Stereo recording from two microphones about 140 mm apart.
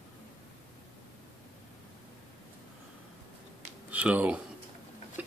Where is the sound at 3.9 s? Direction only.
10° right (ahead or behind).